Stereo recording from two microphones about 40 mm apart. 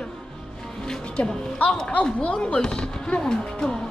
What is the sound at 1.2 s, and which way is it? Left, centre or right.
A woman's voice, left.